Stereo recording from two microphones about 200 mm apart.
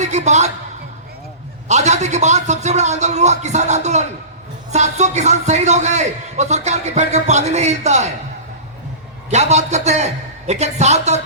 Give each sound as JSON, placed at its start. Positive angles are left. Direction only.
{"t": 0.0, "sound": "a woman's voice", "side_deg": -35}
{"t": 1.6, "sound": "a man's voice", "side_deg": -35}
{"t": 9.3, "sound": "a man's voice", "side_deg": -35}